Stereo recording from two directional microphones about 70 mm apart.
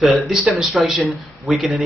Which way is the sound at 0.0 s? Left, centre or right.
Centre.